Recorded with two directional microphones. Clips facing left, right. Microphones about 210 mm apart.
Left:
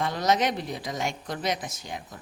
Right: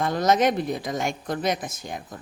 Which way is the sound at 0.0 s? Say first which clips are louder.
Right 4 dB; 50° right (ahead or behind).